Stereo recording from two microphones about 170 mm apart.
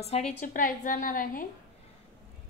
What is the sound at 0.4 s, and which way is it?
A woman's voice, 55° left (ahead or behind).